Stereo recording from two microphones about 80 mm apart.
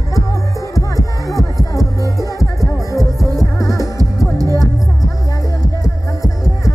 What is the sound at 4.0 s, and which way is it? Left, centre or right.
Music, right.